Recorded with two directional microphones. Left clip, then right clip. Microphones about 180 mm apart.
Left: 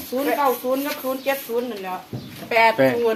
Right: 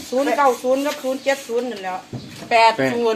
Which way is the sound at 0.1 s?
30° right (ahead or behind).